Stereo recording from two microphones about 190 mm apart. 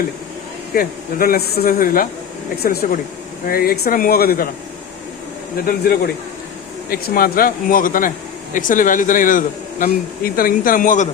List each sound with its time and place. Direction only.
0.8 s speech: 50° left (ahead or behind)
5.6 s speech: 50° left (ahead or behind)